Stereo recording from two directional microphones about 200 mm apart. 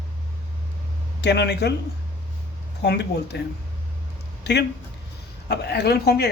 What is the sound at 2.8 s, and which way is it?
Speech, 55° left (ahead or behind).